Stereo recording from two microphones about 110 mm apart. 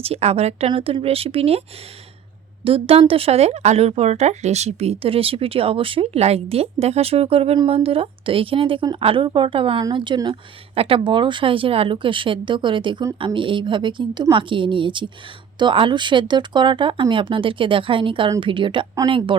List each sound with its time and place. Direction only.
0.0 s speech: 70° right (ahead or behind)
2.6 s speech: 55° right (ahead or behind)